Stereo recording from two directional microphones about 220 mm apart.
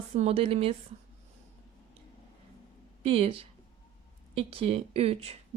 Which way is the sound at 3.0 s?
25° right (ahead or behind).